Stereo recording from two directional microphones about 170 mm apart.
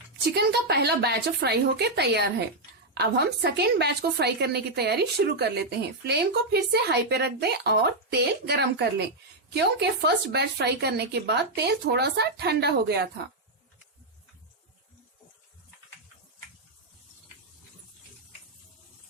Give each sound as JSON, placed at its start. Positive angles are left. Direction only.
{"t": 0.3, "sound": "speech", "side_deg": -75}